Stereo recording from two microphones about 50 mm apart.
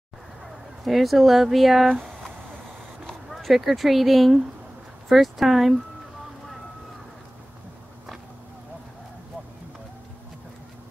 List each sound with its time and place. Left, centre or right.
0.8 s speech: centre
3.1 s speech: centre